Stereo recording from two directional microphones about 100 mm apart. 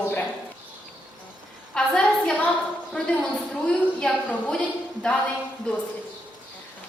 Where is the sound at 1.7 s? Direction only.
5° left (ahead or behind).